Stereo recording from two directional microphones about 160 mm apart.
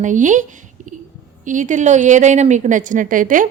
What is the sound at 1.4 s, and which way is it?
A woman's voice, 50° right (ahead or behind).